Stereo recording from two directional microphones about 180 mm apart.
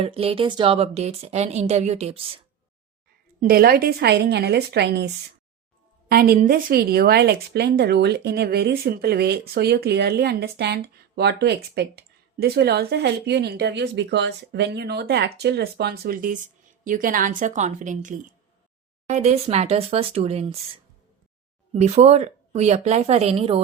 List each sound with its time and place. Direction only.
0.0 s a woman's voice: 30° right (ahead or behind)
3.4 s a woman's voice: 55° right (ahead or behind)
6.1 s a woman's voice: 55° right (ahead or behind); by 20.6 s 35° right (ahead or behind)
21.7 s a woman's voice: 35° right (ahead or behind)